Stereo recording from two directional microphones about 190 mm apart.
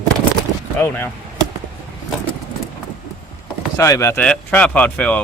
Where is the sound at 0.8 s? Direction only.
10° left (ahead or behind).